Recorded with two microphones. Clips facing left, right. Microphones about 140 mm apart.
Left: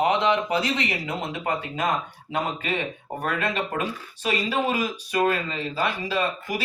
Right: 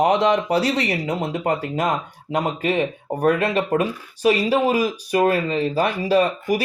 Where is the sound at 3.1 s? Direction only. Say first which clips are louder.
Right 8 dB; 40° right (ahead or behind).